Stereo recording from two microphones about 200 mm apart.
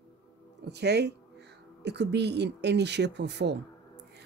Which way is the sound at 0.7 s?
55° right (ahead or behind).